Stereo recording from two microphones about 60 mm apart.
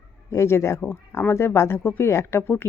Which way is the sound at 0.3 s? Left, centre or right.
Left.